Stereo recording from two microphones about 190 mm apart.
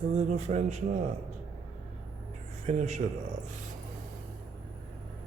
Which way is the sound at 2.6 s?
40° right (ahead or behind).